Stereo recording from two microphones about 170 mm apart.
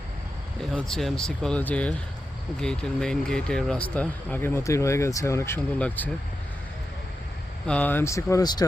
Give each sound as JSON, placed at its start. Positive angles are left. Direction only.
{"t": 0.6, "sound": "speech", "side_deg": 5}
{"t": 7.7, "sound": "speech", "side_deg": 10}